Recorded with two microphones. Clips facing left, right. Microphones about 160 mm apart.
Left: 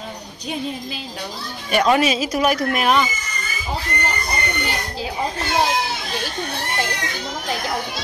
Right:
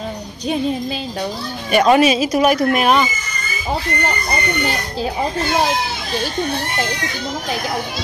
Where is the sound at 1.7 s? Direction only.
15° right (ahead or behind).